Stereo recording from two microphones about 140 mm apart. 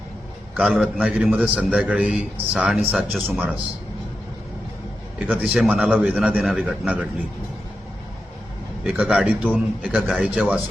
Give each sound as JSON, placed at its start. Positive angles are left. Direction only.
{"t": 0.5, "sound": "a man's voice", "side_deg": 0}
{"t": 5.2, "sound": "a man's voice", "side_deg": -5}
{"t": 8.8, "sound": "a man's voice", "side_deg": -5}